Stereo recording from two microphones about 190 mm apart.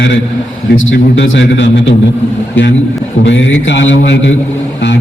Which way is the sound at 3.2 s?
75° left (ahead or behind).